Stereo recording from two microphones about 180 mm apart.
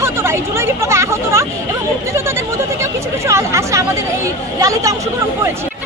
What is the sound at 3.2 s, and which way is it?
Speech, 15° right (ahead or behind).